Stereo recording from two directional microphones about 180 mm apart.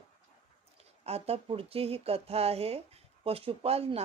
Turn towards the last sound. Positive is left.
turn(degrees=-35)  # may be behind; listen again after turning